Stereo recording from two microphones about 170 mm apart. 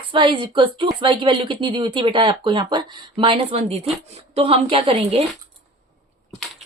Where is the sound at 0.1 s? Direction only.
30° right (ahead or behind).